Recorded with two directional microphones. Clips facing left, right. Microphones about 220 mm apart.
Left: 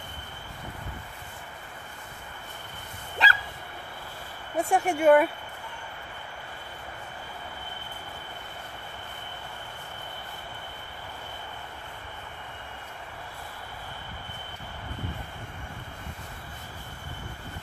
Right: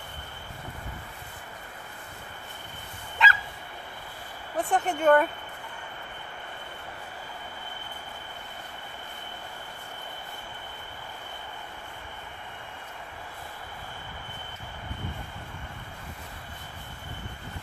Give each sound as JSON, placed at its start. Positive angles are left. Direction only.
{"t": 3.2, "sound": "dog", "side_deg": 35}
{"t": 4.6, "sound": "speech", "side_deg": 10}